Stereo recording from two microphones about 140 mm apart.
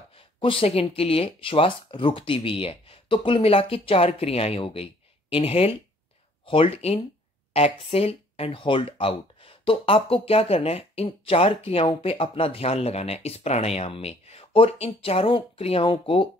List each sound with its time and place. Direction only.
0.1 s speech: 40° left (ahead or behind)